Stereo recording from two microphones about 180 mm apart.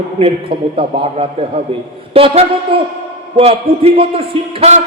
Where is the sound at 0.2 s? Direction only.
30° right (ahead or behind).